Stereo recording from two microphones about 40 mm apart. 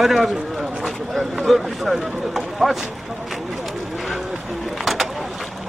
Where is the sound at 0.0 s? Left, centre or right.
Centre.